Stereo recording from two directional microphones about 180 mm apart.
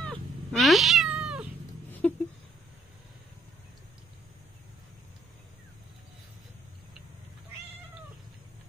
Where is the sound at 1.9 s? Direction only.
10° left (ahead or behind).